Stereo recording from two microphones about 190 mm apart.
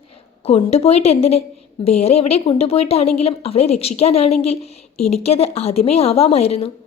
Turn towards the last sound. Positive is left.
turn(degrees=30)  # may be behind; listen again after turning